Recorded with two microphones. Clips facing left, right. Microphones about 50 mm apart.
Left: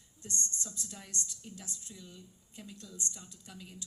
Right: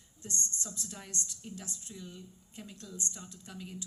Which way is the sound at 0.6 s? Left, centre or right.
Right.